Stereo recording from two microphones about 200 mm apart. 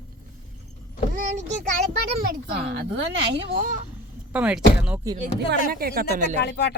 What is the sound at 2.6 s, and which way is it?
Speech, 55° right (ahead or behind).